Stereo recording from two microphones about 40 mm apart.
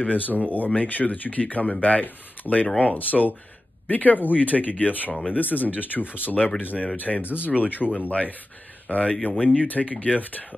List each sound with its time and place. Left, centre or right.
0.0 s speech: left
7.9 s speech: left